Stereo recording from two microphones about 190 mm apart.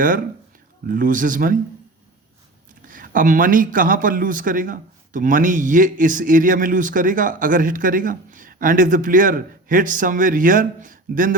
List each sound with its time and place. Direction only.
0.9 s speech: 45° right (ahead or behind)
2.8 s speech: 45° right (ahead or behind)